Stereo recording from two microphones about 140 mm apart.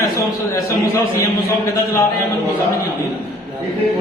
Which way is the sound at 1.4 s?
20° left (ahead or behind).